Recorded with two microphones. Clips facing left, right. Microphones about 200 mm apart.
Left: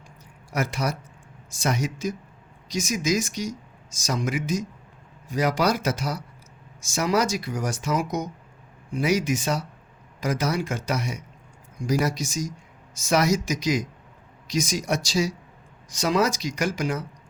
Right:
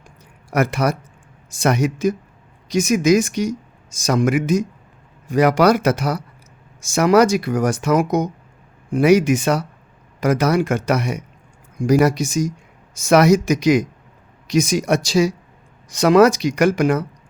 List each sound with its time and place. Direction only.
0.5 s speech: 60° right (ahead or behind)